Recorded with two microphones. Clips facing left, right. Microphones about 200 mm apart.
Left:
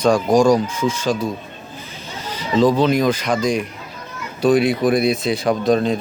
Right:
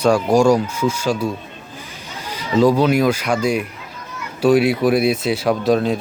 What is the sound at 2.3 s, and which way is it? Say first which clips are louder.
A man's voice: right 1 dB; 10° right (ahead or behind).